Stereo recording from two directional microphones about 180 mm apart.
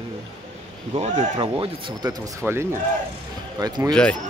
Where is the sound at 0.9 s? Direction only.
35° right (ahead or behind); by 2.7 s 15° right (ahead or behind).